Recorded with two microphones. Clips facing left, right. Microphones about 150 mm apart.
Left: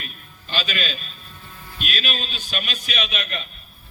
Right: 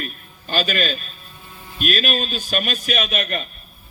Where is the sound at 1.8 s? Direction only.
45° right (ahead or behind).